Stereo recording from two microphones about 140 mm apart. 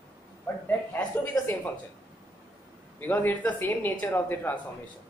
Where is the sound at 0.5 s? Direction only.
20° left (ahead or behind).